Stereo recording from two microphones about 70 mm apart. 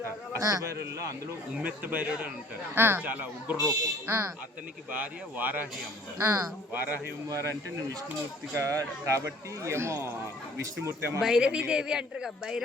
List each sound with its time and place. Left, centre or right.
0.3 s speech: right
1.6 s speech: right
2.0 s a man's voice: centre
2.7 s speech: right
4.9 s speech: right
6.1 s speech: right
7.3 s speech: right
8.5 s speech: right
11.2 s a man's voice: centre